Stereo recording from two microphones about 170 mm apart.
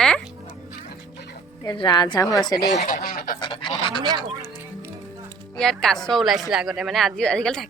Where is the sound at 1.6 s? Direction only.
25° left (ahead or behind).